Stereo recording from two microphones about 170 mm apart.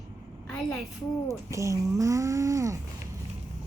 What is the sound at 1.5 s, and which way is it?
Speech, 20° right (ahead or behind).